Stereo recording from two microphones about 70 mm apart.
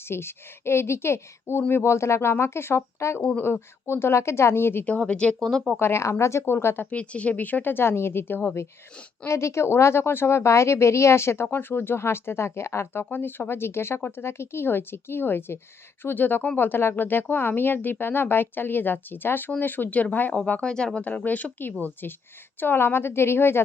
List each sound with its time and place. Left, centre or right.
0.1 s speech: left
4.9 s speech: centre
5.7 s speech: left
6.9 s speech: centre
9.2 s speech: left
20.3 s speech: centre; by 23.6 s left